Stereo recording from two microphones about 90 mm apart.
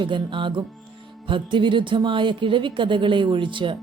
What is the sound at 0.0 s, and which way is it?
Speech, 65° right (ahead or behind).